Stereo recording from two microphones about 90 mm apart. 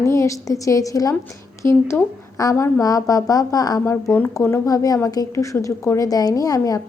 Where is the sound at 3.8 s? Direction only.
30° left (ahead or behind).